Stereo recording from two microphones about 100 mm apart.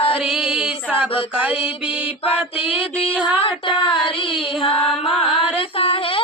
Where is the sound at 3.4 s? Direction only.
60° left (ahead or behind).